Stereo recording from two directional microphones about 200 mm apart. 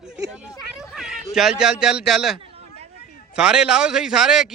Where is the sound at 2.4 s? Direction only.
30° right (ahead or behind).